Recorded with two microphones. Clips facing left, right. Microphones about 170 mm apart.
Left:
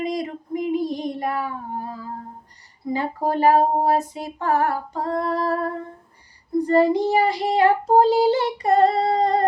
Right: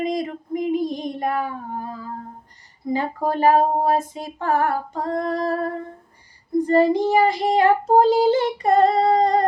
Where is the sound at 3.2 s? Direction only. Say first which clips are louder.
Even; 50° right (ahead or behind).